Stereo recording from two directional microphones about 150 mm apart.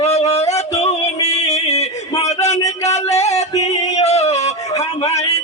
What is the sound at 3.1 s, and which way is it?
Music, 45° left (ahead or behind).